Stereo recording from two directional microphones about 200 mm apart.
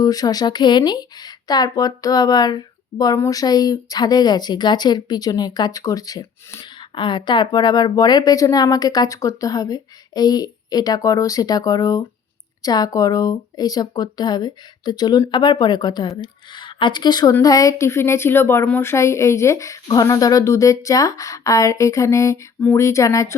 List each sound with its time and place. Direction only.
0.0 s speech: 20° left (ahead or behind)